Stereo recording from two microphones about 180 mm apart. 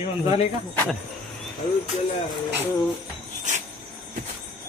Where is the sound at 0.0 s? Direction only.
35° left (ahead or behind).